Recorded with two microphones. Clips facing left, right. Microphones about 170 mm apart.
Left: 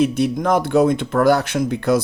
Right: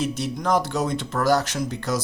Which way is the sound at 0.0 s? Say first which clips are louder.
Left 8 dB; 55° left (ahead or behind).